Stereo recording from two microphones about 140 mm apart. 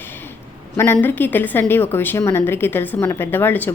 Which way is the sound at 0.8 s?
15° left (ahead or behind).